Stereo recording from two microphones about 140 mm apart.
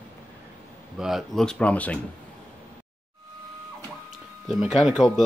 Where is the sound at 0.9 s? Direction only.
Centre (ahead or behind).